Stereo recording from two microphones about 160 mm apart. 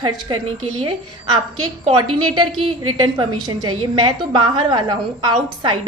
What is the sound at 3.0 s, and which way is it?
A woman's voice, 25° right (ahead or behind).